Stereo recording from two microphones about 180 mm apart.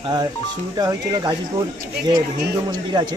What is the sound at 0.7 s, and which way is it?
Speech, 20° right (ahead or behind).